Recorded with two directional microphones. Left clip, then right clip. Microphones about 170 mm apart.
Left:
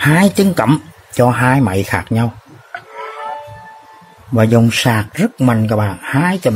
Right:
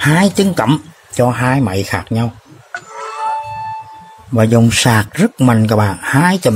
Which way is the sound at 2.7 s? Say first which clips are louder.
Right 3 dB; 25° right (ahead or behind).